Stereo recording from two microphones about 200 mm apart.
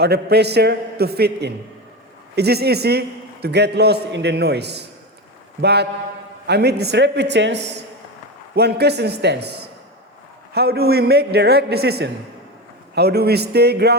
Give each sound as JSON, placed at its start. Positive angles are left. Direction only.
{"t": 0.0, "sound": "a man's voice", "side_deg": -55}